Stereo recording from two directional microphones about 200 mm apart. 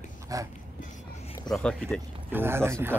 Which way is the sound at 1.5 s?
5° left (ahead or behind).